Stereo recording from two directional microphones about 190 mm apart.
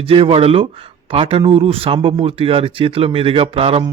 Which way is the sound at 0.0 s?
30° right (ahead or behind).